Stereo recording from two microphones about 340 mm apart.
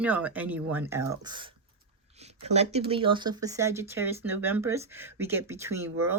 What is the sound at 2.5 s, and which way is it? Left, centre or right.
Speech, centre.